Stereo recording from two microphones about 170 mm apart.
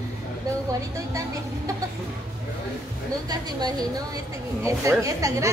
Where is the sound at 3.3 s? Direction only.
25° right (ahead or behind).